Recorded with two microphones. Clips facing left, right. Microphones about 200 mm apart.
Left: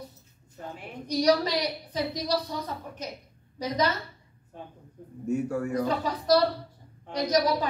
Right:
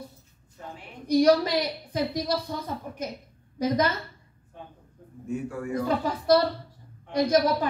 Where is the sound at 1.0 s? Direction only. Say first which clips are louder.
Right 4 dB; 50° right (ahead or behind).